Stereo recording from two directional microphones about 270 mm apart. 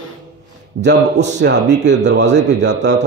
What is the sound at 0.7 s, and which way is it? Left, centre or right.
A man's voice, right.